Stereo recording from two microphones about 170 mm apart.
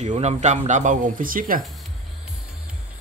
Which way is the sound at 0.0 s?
40° right (ahead or behind).